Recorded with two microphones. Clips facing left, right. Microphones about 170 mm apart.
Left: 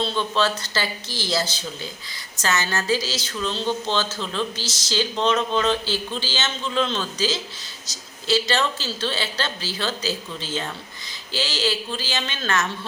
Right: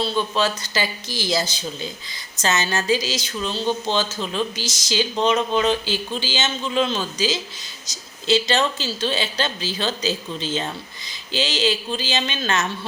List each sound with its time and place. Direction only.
0.0 s a woman's voice: 10° right (ahead or behind)